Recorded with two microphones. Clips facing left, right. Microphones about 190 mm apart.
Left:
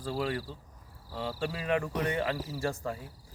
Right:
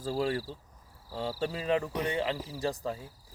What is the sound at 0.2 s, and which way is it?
Speech, 30° right (ahead or behind).